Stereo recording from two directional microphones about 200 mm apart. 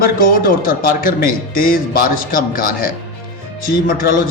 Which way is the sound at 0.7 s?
45° left (ahead or behind).